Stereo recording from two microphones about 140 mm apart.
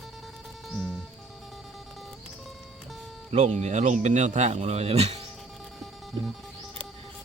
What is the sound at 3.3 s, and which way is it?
Speech, 50° right (ahead or behind).